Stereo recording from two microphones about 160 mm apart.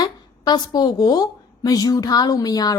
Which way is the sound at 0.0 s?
25° left (ahead or behind).